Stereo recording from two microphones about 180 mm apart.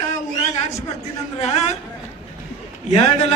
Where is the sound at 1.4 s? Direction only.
40° left (ahead or behind).